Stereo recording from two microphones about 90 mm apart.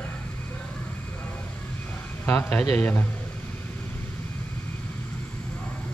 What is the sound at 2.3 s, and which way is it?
Speech, 20° left (ahead or behind).